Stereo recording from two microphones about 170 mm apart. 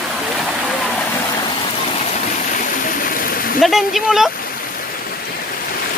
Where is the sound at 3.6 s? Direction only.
Centre (ahead or behind).